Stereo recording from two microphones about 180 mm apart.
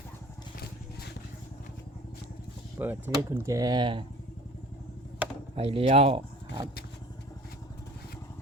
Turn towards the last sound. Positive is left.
turn(degrees=-30)  # may be behind; listen again after turning